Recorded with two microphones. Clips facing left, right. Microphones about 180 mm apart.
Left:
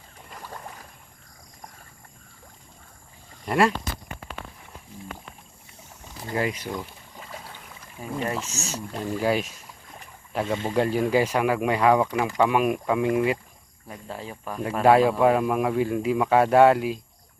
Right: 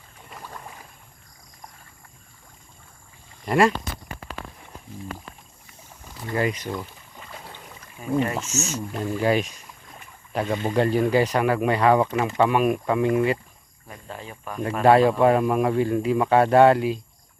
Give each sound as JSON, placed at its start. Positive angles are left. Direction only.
{"t": 3.4, "sound": "speech", "side_deg": 0}
{"t": 6.3, "sound": "speech", "side_deg": 5}
{"t": 8.2, "sound": "speech", "side_deg": 35}
{"t": 9.0, "sound": "speech", "side_deg": 5}
{"t": 14.4, "sound": "speech", "side_deg": 5}